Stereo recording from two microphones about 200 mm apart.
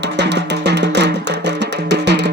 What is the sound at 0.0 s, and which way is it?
Music, 60° right (ahead or behind).